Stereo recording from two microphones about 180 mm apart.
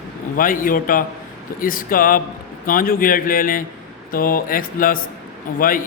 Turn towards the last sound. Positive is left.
turn(degrees=50)  # may be behind; listen again after turning